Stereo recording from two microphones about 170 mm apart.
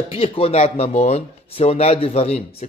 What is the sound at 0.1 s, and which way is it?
Speech, 35° left (ahead or behind).